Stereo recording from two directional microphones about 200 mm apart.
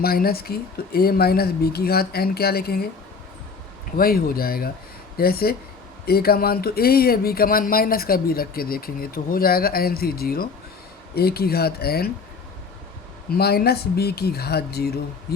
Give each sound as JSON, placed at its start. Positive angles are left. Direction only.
{"t": 0.0, "sound": "speech", "side_deg": 50}
{"t": 3.9, "sound": "speech", "side_deg": 50}
{"t": 13.3, "sound": "speech", "side_deg": 50}